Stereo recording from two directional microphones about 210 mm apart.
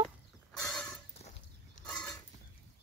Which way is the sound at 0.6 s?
5° left (ahead or behind).